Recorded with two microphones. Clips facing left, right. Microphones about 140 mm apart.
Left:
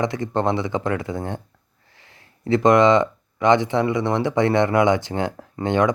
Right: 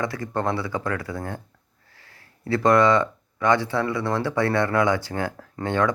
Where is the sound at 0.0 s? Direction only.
20° left (ahead or behind).